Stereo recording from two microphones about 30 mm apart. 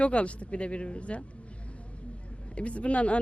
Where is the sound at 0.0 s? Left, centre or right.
Left.